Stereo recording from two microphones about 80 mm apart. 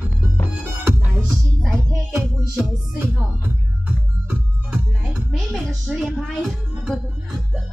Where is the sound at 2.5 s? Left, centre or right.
Centre.